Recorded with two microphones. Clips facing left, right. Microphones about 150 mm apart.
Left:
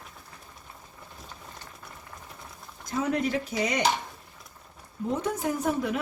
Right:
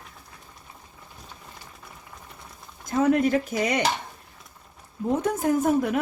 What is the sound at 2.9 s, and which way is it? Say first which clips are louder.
Speech: right 7 dB; 50° right (ahead or behind).